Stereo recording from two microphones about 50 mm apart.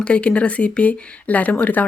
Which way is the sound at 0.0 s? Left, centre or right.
Left.